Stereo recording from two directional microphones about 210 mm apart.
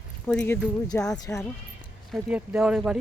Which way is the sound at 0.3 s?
5° left (ahead or behind).